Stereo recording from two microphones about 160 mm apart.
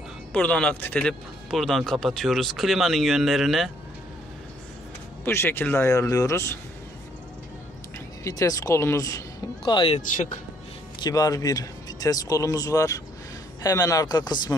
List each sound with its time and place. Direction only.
0.3 s speech: 10° left (ahead or behind)
5.2 s speech: 15° left (ahead or behind)
8.2 s speech: 20° left (ahead or behind)
9.9 s speech: 50° left (ahead or behind)
11.0 s speech: 25° left (ahead or behind)